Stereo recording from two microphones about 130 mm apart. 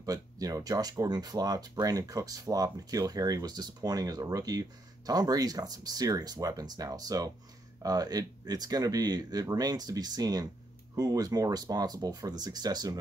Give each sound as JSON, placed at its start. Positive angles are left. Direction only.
{"t": 0.0, "sound": "speech", "side_deg": -25}